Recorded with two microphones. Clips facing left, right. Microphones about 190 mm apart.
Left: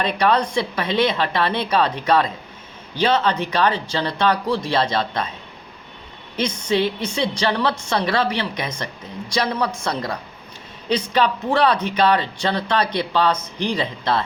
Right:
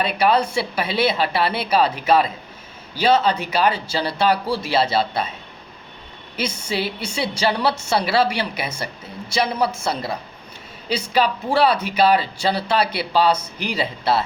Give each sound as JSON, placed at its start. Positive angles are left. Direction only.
{"t": 0.0, "sound": "speech", "side_deg": -5}
{"t": 2.9, "sound": "speech", "side_deg": -10}
{"t": 6.3, "sound": "speech", "side_deg": -10}